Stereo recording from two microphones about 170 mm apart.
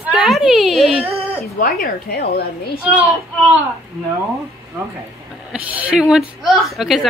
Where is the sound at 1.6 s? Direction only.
55° left (ahead or behind).